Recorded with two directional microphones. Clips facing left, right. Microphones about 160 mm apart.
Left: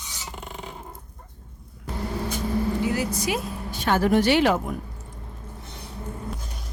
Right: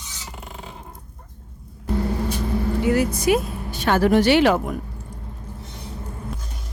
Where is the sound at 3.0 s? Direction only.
55° right (ahead or behind); by 4.6 s 80° right.